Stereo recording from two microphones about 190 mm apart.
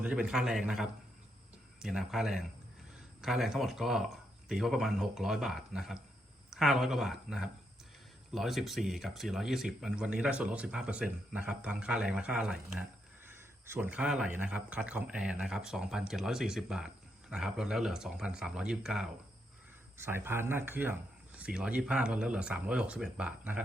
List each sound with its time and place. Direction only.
0.0 s speech: 5° right (ahead or behind)